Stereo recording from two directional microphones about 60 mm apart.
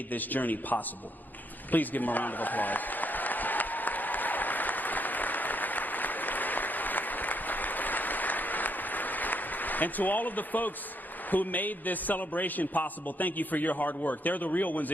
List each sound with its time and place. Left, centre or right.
0.1 s a man's voice: left
1.7 s a sound: left
11.3 s a man's voice: left